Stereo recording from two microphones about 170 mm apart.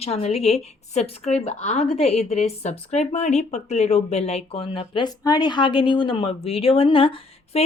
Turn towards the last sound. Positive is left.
turn(degrees=35)  # may be behind; listen again after turning